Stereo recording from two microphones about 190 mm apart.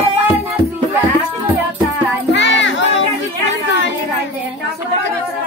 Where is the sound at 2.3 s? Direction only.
65° left (ahead or behind).